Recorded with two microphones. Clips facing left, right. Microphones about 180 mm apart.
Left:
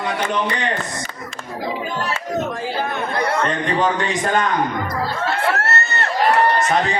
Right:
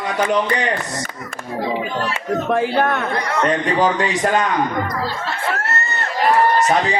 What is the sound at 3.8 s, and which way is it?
Speech, 35° right (ahead or behind).